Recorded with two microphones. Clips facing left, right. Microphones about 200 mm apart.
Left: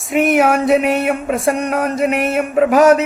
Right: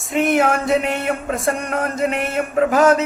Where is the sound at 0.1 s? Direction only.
15° left (ahead or behind).